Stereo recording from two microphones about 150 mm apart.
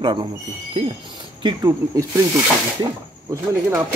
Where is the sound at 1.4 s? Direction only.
20° right (ahead or behind).